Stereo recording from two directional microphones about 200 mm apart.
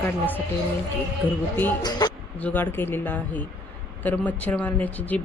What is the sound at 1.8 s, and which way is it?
Speech, 20° left (ahead or behind).